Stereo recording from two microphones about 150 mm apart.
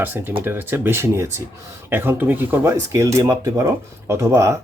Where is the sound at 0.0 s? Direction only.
15° right (ahead or behind).